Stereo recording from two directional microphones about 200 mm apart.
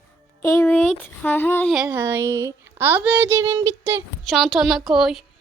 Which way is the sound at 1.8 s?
10° right (ahead or behind).